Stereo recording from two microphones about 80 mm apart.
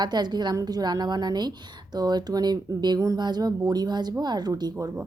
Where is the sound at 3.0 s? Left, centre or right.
Right.